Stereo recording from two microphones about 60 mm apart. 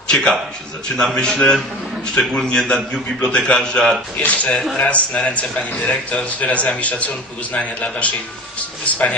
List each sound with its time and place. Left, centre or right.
0.1 s a man's voice: centre
4.2 s speech: left